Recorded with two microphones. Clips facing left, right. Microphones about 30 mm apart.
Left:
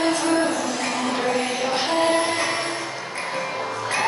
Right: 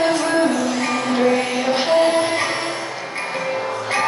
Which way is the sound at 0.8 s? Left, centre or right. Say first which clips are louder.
Right 5 dB; right.